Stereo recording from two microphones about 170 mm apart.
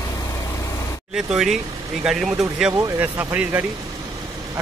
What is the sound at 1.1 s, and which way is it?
Speech, 5° right (ahead or behind).